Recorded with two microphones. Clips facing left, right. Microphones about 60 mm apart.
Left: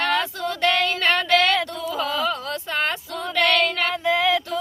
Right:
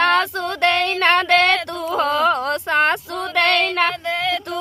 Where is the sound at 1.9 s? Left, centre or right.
Right.